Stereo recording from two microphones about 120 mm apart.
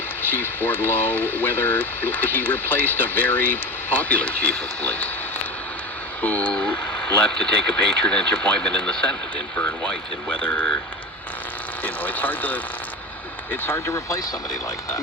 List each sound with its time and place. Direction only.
0.2 s speech: 15° left (ahead or behind)
6.2 s speech: 10° left (ahead or behind)
9.6 s speech: 20° left (ahead or behind)
11.8 s speech: 15° left (ahead or behind)